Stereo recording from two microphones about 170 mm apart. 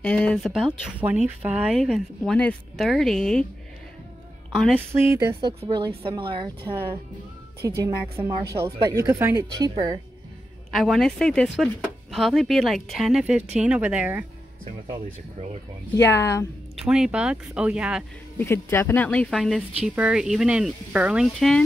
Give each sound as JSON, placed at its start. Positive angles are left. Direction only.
{"t": 0.0, "sound": "speech", "side_deg": 5}
{"t": 0.9, "sound": "speech", "side_deg": -10}
{"t": 4.7, "sound": "a woman's voice", "side_deg": -15}
{"t": 5.4, "sound": "a woman's voice", "side_deg": -25}
{"t": 7.6, "sound": "a woman's voice", "side_deg": -15}
{"t": 10.7, "sound": "a woman's voice", "side_deg": 0}
{"t": 16.1, "sound": "speech", "side_deg": 15}
{"t": 16.8, "sound": "speech", "side_deg": -5}
{"t": 18.4, "sound": "speech", "side_deg": 15}